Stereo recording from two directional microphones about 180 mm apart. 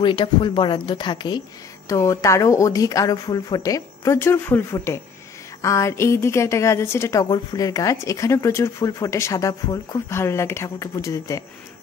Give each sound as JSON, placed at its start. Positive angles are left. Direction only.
{"t": 0.0, "sound": "a woman's voice", "side_deg": 25}